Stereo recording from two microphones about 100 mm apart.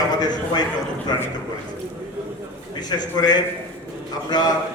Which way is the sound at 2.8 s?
45° left (ahead or behind).